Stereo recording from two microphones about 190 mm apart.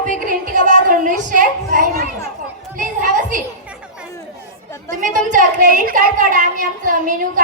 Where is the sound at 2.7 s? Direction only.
45° right (ahead or behind).